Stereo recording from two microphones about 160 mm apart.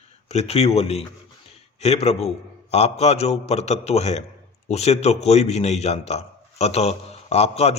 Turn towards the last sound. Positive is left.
turn(degrees=40)  # may be behind; listen again after turning